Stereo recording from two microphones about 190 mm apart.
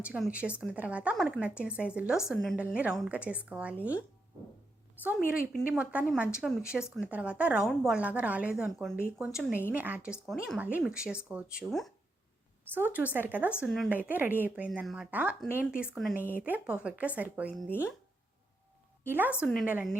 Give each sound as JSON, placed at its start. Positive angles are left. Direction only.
{"t": 0.0, "sound": "a woman's voice", "side_deg": -5}
{"t": 5.5, "sound": "a woman's voice", "side_deg": -5}
{"t": 12.7, "sound": "a woman's voice", "side_deg": -10}
{"t": 13.6, "sound": "a woman's voice", "side_deg": 0}
{"t": 19.0, "sound": "a woman's voice", "side_deg": -10}